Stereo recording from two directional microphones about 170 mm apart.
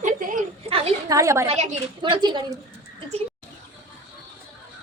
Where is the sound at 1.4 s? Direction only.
40° right (ahead or behind).